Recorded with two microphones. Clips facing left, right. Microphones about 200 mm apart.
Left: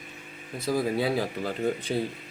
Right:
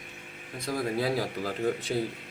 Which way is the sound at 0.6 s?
5° left (ahead or behind).